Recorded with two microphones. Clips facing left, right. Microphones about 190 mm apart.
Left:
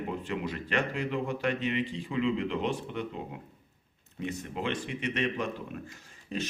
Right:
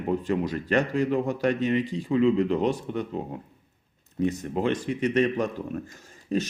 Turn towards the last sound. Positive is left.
turn(degrees=-45)  # may be behind; listen again after turning